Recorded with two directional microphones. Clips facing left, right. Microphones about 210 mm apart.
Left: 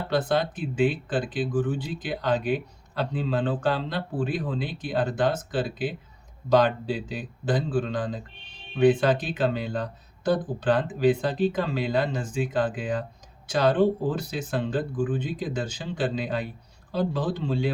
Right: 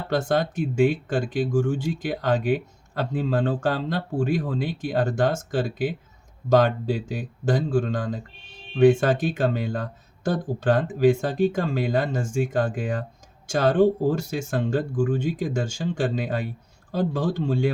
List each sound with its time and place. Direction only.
0.1 s speech: 45° right (ahead or behind)